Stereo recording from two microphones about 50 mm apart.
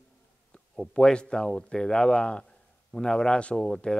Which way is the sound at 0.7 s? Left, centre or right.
Centre.